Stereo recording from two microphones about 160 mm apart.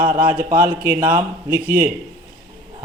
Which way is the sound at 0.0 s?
60° right (ahead or behind).